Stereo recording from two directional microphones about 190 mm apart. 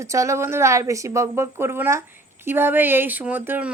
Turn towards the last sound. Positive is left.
turn(degrees=-10)  # may be behind; listen again after turning